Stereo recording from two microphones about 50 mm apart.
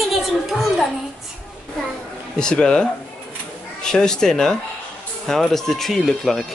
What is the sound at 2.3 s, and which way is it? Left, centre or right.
Speech, centre.